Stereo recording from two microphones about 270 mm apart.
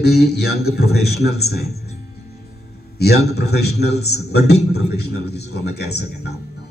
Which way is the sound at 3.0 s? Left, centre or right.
Left.